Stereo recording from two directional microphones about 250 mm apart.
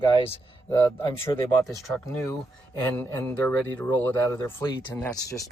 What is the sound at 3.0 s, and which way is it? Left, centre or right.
Speech, centre.